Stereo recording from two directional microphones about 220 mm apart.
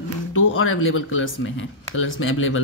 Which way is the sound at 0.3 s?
60° left (ahead or behind).